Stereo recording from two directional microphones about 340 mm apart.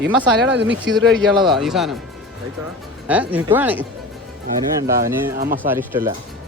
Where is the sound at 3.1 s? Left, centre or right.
Centre.